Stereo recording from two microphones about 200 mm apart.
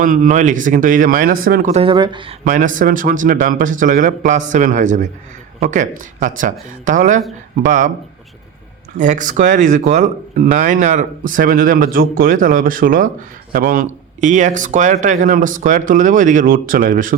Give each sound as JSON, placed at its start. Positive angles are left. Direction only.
{"t": 0.0, "sound": "speech", "side_deg": -40}
{"t": 1.7, "sound": "speech", "side_deg": -25}
{"t": 2.4, "sound": "speech", "side_deg": -40}
{"t": 9.0, "sound": "speech", "side_deg": -40}